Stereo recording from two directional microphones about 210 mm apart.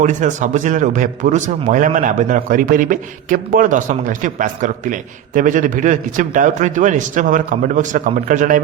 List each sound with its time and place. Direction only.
0.0 s speech: 35° right (ahead or behind)